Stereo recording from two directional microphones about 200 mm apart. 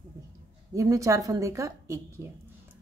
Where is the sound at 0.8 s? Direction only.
15° right (ahead or behind).